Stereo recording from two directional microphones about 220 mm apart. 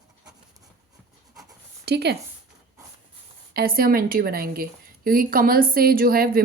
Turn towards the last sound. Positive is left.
turn(degrees=-45)  # may be behind; listen again after turning